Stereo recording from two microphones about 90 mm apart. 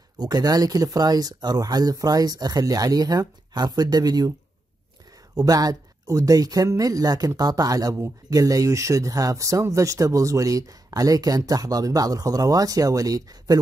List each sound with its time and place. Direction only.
0.2 s speech: 50° right (ahead or behind)
5.3 s speech: 45° right (ahead or behind)